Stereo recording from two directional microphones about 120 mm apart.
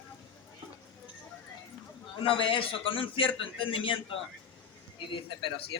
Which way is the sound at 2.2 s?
45° left (ahead or behind).